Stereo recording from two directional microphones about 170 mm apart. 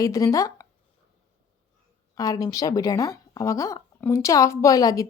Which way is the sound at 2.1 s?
20° left (ahead or behind).